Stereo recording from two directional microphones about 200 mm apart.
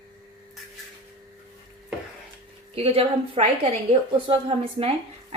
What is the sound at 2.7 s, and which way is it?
Speech, 30° right (ahead or behind).